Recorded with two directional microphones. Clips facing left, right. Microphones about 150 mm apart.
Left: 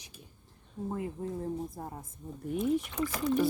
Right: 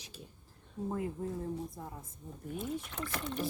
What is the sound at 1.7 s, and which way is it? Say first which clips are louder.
Speech: left 4 dB; 45° left (ahead or behind).